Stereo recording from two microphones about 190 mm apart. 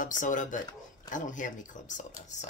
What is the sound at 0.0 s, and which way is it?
Speech, 45° left (ahead or behind).